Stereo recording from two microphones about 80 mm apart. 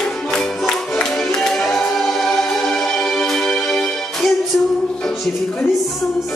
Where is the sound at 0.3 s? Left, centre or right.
Centre.